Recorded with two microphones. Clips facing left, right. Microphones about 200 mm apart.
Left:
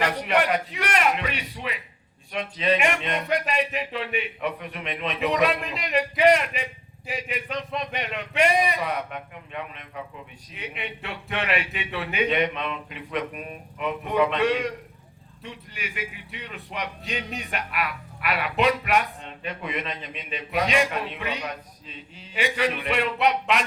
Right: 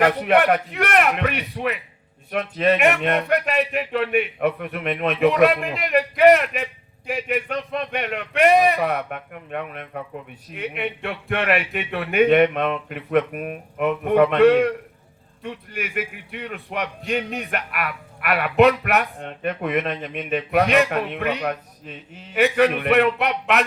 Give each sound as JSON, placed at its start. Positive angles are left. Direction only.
{"t": 0.0, "sound": "speech", "side_deg": -55}